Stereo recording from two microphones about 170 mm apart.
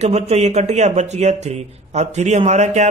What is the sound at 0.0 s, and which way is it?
A man's voice, 40° right (ahead or behind).